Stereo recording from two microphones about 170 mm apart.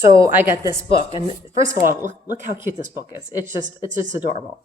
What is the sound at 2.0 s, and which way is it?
A woman's voice, 50° right (ahead or behind).